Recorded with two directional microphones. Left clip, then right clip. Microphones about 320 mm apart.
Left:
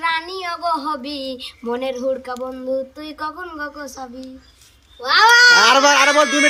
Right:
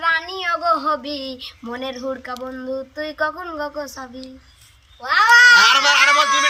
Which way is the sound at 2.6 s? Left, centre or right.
Centre.